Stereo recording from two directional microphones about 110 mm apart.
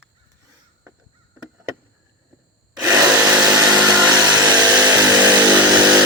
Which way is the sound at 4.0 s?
20° right (ahead or behind).